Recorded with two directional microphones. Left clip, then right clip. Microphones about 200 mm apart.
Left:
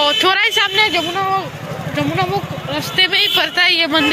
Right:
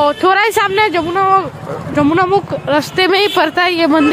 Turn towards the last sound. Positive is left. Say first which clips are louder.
# right 1 dB
turn(degrees=-30)  # may be behind; listen again after turning